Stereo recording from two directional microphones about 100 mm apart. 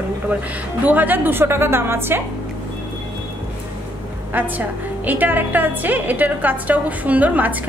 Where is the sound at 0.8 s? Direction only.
15° right (ahead or behind).